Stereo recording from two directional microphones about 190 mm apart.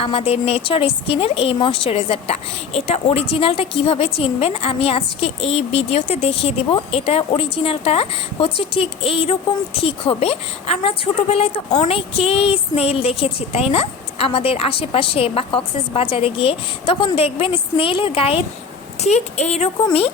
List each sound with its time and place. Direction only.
0.0 s a woman's voice: 30° left (ahead or behind)